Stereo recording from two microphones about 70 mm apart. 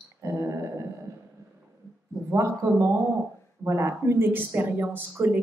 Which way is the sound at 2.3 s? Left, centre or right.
Right.